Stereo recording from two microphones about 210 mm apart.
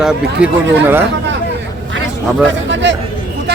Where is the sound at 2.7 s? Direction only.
60° right (ahead or behind).